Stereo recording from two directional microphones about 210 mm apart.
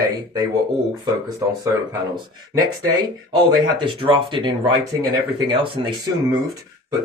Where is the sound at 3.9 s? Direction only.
25° right (ahead or behind).